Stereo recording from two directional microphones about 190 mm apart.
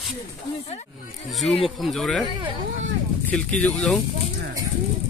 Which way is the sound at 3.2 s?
5° left (ahead or behind).